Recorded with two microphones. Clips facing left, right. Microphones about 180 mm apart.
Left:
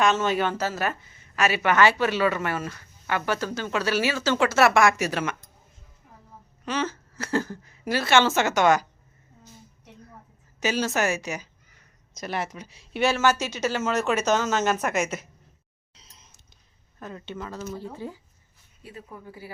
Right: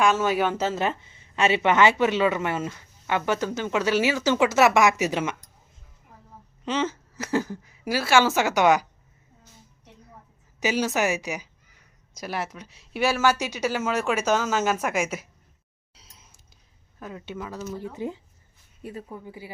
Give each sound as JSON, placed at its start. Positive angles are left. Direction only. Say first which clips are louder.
{"t": 0.0, "sound": "speech", "louder": "right 1 dB", "side_deg": -10}
{"t": 0.5, "sound": "speech", "louder": "right 2 dB", "side_deg": -20}
{"t": 6.7, "sound": "speech", "louder": "right 2 dB", "side_deg": -20}
{"t": 10.6, "sound": "speech", "louder": "right 1 dB", "side_deg": -15}
{"t": 16.0, "sound": "a sound", "louder": "even", "side_deg": -5}
{"t": 17.0, "sound": "speech", "louder": "right 1 dB", "side_deg": -5}
{"t": 17.9, "sound": "speech", "louder": "right 4 dB", "side_deg": -20}